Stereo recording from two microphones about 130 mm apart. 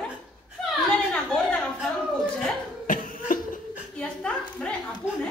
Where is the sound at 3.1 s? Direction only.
90° left.